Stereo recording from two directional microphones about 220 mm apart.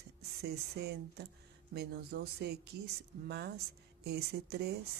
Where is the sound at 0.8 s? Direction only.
50° right (ahead or behind).